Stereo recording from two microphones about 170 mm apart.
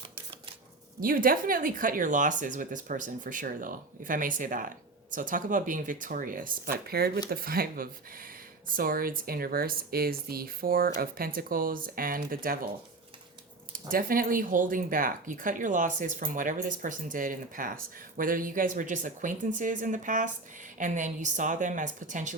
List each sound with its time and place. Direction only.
1.0 s speech: 55° right (ahead or behind)
13.8 s speech: 55° right (ahead or behind)